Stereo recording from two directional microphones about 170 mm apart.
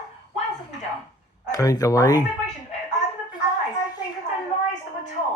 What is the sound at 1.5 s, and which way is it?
Speech, 20° left (ahead or behind).